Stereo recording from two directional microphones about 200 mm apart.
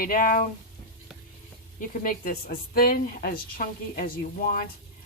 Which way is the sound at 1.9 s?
45° left (ahead or behind).